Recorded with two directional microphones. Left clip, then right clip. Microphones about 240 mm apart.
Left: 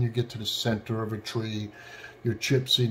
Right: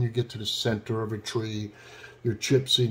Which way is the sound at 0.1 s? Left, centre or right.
Centre.